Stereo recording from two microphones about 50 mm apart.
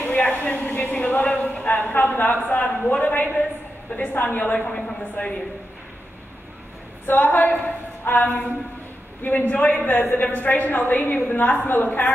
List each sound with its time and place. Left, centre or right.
0.0 s a sound: left
4.2 s a woman's voice: left
4.6 s a woman's voice: centre
5.2 s a woman's voice: left
7.1 s a woman's voice: left